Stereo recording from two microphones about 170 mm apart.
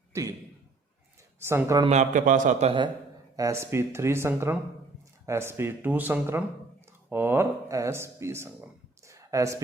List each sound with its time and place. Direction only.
0.1 s a sound: 20° right (ahead or behind)
1.4 s speech: 15° right (ahead or behind)
1.9 s a man's voice: 45° right (ahead or behind)
3.3 s speech: 15° right (ahead or behind)